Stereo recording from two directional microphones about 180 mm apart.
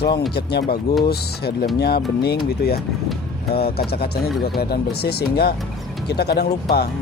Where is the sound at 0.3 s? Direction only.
65° left (ahead or behind).